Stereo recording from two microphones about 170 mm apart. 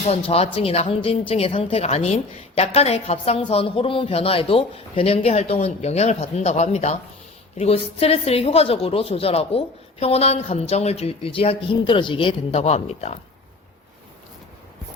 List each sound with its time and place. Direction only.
0.1 s a woman's voice: 35° left (ahead or behind)